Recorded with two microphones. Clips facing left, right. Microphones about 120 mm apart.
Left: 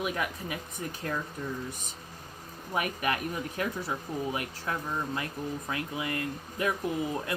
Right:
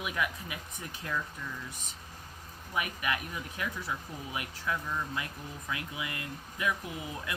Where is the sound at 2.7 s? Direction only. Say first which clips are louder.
Left 3 dB; 45° left (ahead or behind).